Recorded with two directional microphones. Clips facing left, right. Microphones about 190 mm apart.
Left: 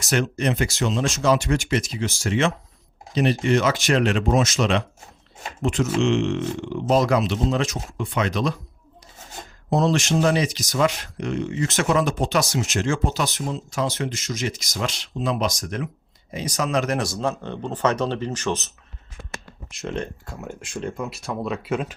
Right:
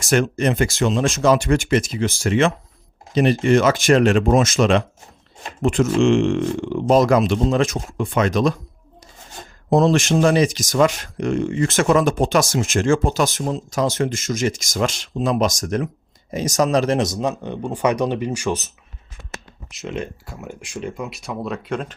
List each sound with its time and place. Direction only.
0.0 s speech: 50° right (ahead or behind)
9.6 s speech: 50° right (ahead or behind); by 21.9 s 5° left (ahead or behind)